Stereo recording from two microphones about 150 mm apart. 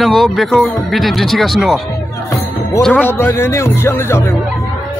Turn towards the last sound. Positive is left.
turn(degrees=15)  # may be behind; listen again after turning